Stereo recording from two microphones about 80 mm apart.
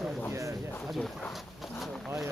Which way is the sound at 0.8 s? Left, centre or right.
Centre.